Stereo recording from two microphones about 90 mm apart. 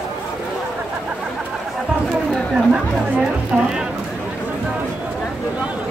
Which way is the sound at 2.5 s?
10° right (ahead or behind).